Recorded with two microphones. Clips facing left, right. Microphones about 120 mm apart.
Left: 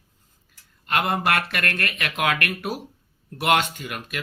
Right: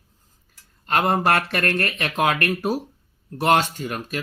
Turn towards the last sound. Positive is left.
turn(degrees=-35)  # may be behind; listen again after turning